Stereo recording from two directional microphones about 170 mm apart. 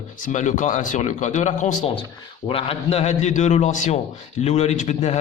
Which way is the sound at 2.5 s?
35° left (ahead or behind).